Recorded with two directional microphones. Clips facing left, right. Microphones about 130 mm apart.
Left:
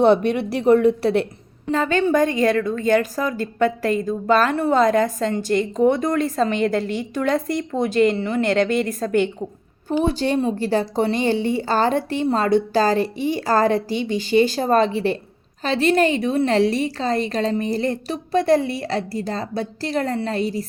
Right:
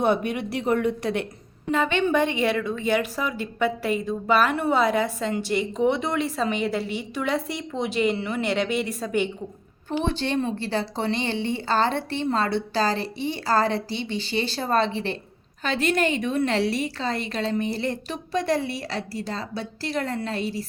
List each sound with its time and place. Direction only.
0.0 s a woman's voice: 10° right (ahead or behind)
0.3 s a woman's voice: 30° left (ahead or behind)
2.6 s a woman's voice: 10° right (ahead or behind)
3.0 s a woman's voice: 40° left (ahead or behind)
3.3 s a woman's voice: 10° right (ahead or behind)
5.8 s a woman's voice: 45° left (ahead or behind)
6.3 s a woman's voice: 10° right (ahead or behind)
7.3 s a woman's voice: 50° left (ahead or behind)
7.9 s a woman's voice: 10° right (ahead or behind)
10.1 s a woman's voice: 40° left (ahead or behind)